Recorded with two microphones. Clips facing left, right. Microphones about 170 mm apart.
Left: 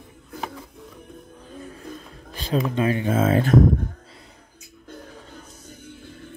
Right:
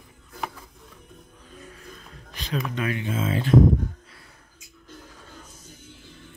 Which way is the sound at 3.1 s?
50° left (ahead or behind).